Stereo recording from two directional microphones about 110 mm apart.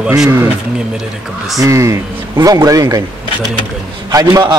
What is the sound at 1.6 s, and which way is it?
A man's voice, 30° right (ahead or behind).